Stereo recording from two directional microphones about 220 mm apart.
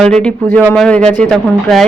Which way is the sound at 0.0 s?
5° left (ahead or behind).